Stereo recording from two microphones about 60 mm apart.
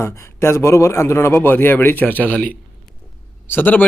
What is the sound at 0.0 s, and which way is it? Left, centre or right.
A man's voice, left.